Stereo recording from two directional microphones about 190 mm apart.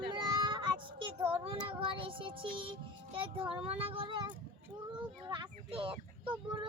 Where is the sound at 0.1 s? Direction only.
25° right (ahead or behind).